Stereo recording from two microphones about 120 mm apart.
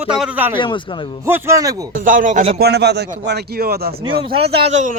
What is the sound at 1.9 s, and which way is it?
Speech, 90° right.